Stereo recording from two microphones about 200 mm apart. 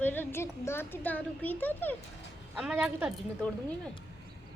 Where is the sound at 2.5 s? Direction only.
5° right (ahead or behind).